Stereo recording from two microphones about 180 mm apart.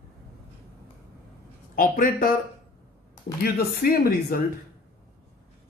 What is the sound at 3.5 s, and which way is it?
Speech, 55° left (ahead or behind).